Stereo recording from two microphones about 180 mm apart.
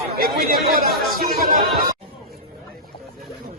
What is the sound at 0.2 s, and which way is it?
Speech, 55° right (ahead or behind).